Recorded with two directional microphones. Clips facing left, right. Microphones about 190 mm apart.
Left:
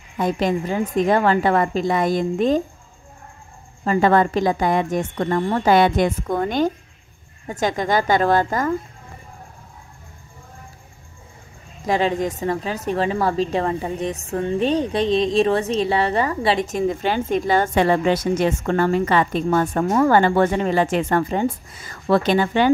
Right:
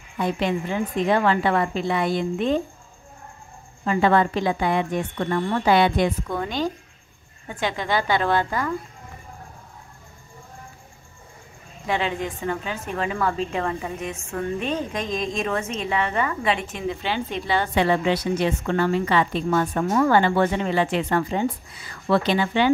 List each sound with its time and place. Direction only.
0.2 s a woman's voice: 40° left (ahead or behind)
3.8 s a woman's voice: 40° left (ahead or behind)
11.8 s a woman's voice: 40° left (ahead or behind)